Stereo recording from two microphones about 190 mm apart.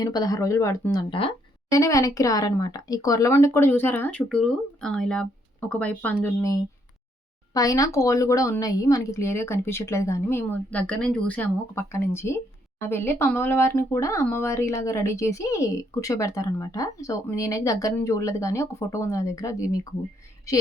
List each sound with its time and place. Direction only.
0.0 s speech: 20° left (ahead or behind)
1.8 s speech: 15° left (ahead or behind)
7.5 s speech: 20° left (ahead or behind)